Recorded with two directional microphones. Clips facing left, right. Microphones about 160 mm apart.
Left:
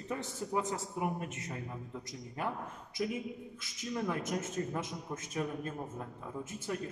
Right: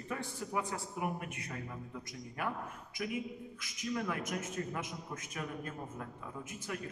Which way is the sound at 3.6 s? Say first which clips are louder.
Even; 25° left (ahead or behind).